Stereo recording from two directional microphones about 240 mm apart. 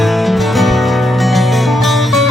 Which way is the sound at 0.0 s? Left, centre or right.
Centre.